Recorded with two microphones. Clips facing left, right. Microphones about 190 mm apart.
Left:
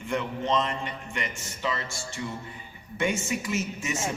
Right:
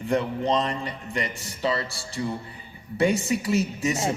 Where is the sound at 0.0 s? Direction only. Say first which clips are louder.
Right 5 dB; 35° right (ahead or behind).